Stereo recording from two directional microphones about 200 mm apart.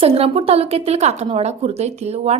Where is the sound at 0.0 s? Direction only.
30° right (ahead or behind).